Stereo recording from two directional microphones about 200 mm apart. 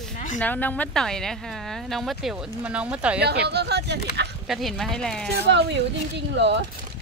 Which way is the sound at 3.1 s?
55° right (ahead or behind).